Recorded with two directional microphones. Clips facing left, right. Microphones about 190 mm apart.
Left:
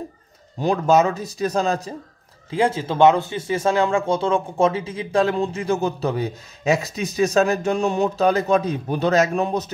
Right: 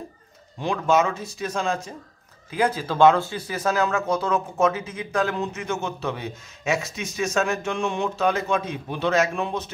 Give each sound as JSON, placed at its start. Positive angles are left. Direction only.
{"t": 0.6, "sound": "speech", "side_deg": 40}
{"t": 2.5, "sound": "speech", "side_deg": 25}